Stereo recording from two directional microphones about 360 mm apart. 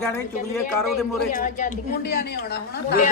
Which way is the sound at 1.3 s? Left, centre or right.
Left.